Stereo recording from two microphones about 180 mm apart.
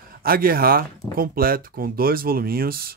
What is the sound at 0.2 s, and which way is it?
Speech, 55° right (ahead or behind).